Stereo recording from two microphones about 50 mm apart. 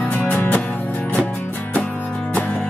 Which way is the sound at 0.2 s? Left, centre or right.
Left.